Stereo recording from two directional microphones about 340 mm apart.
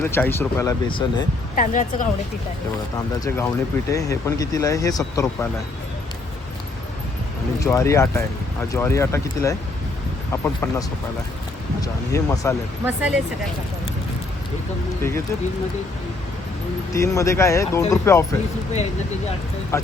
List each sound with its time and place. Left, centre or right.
0.0 s a woman's voice: centre
3.2 s speech: centre
7.6 s speech: centre
12.8 s speech: centre
16.9 s speech: centre
19.7 s speech: centre